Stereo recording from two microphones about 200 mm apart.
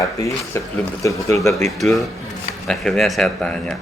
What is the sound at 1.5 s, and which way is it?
Speech, centre (ahead or behind).